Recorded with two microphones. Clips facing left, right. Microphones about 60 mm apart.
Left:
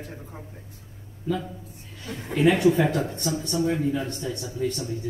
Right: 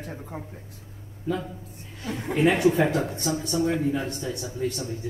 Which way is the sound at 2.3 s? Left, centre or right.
Right.